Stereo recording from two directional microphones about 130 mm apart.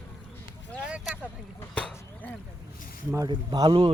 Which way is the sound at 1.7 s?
10° left (ahead or behind).